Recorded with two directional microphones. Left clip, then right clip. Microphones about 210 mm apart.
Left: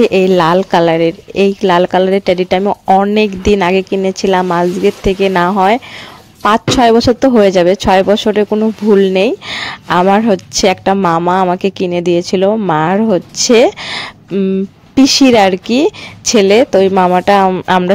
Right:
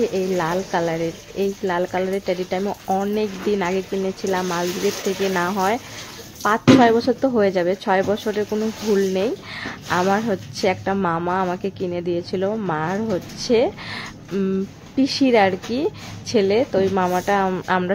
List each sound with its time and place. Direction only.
0.0 s speech: 45° left (ahead or behind)
14.3 s speech: 20° left (ahead or behind)
15.0 s speech: 35° left (ahead or behind)